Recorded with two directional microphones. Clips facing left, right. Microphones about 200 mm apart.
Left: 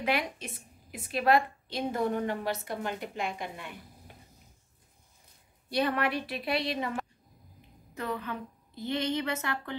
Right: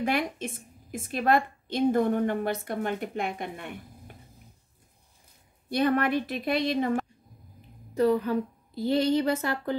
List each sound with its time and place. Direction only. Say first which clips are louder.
0.0 s a woman's voice: right 3 dB; 50° right (ahead or behind)
5.7 s a woman's voice: right 5 dB; 50° right (ahead or behind)
7.9 s a woman's voice: right 12 dB; 35° right (ahead or behind)